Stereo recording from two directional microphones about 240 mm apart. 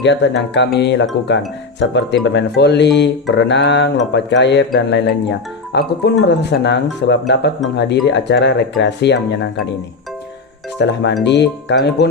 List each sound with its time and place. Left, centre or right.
0.0 s speech: left
10.8 s speech: left